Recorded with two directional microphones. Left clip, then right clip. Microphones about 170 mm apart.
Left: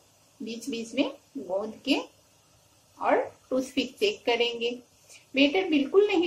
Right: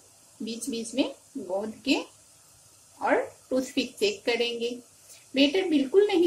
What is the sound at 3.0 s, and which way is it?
A woman's voice, 50° right (ahead or behind).